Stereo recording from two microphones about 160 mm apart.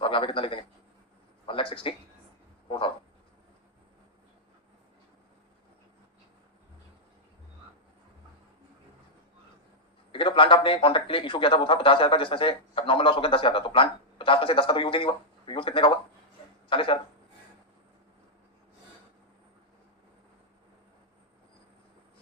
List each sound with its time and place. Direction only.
0.0 s a man's voice: 30° left (ahead or behind)
2.6 s a sound: 30° left (ahead or behind)
10.1 s a man's voice: 35° left (ahead or behind)